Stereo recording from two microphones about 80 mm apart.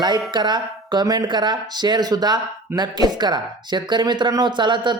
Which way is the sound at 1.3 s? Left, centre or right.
Right.